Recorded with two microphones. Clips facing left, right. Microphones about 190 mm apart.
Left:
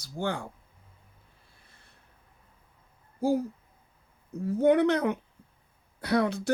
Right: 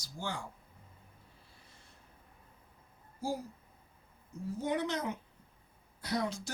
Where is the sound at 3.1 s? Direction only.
60° left (ahead or behind).